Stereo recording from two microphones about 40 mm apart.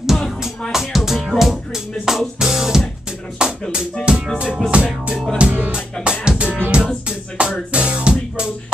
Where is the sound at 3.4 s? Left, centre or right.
Right.